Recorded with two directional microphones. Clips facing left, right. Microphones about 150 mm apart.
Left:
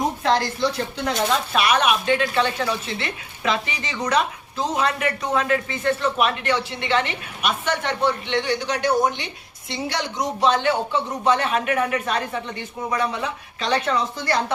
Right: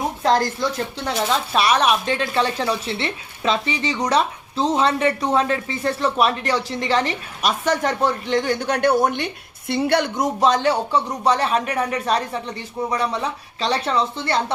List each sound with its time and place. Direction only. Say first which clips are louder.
0.2 s a woman's voice: right 2 dB; 40° right (ahead or behind)
1.5 s a woman's voice: right 3 dB; 35° right (ahead or behind)